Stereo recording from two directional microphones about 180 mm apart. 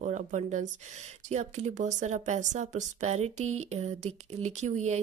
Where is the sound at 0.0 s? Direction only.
40° right (ahead or behind).